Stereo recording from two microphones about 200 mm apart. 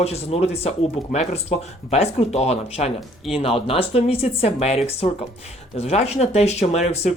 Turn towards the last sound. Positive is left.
turn(degrees=30)  # may be behind; listen again after turning